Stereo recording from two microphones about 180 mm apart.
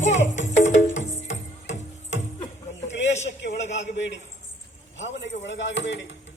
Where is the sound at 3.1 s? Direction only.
40° left (ahead or behind).